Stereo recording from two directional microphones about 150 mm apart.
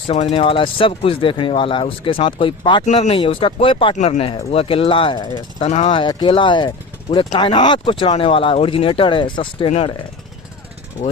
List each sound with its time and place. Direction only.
0.1 s speech: 40° left (ahead or behind)
2.8 s speech: 45° left (ahead or behind)
3.9 s speech: 55° left (ahead or behind)
4.2 s speech: 40° left (ahead or behind)
5.6 s speech: 50° left (ahead or behind)
5.9 s speech: 30° left (ahead or behind)